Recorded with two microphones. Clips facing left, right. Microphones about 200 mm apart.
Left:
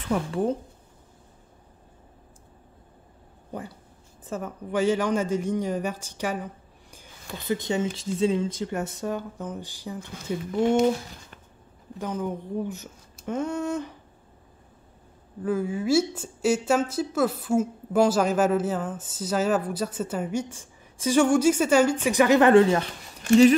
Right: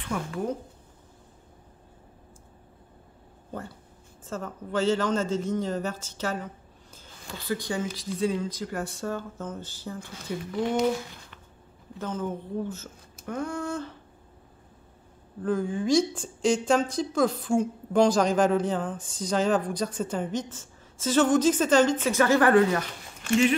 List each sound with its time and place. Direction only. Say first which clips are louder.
0.1 s speech: left 5 dB; 30° left (ahead or behind)
4.3 s a woman's voice: left 2 dB; 15° left (ahead or behind)
12.0 s a woman's voice: left 2 dB; 15° left (ahead or behind)
15.4 s a woman's voice: left 1 dB; 5° left (ahead or behind); by 22.8 s 25° left (ahead or behind)